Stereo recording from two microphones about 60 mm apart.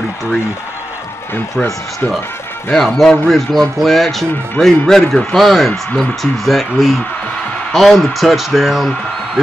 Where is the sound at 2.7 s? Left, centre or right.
Centre.